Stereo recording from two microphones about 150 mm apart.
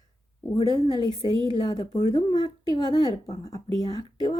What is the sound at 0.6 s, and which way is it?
A woman's voice, 25° left (ahead or behind).